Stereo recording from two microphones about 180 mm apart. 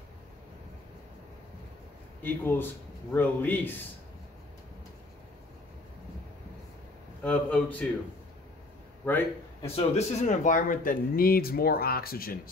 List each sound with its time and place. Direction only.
2.2 s a man's voice: 10° left (ahead or behind)
7.2 s a man's voice: 10° left (ahead or behind)
9.0 s a man's voice: 10° left (ahead or behind)
9.8 s speech: 40° left (ahead or behind); by 12.4 s 55° left (ahead or behind)